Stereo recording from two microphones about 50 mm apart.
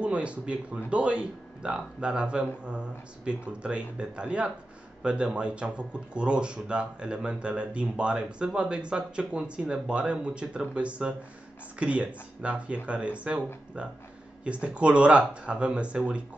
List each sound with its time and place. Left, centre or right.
0.0 s speech: right